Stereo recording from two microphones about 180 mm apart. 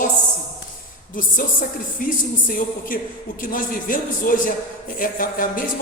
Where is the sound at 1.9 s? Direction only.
50° left (ahead or behind).